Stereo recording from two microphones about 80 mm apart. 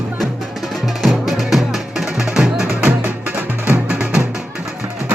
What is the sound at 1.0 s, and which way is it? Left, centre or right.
Music, centre.